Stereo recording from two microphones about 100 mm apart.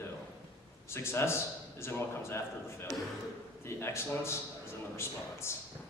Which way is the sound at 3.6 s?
25° left (ahead or behind).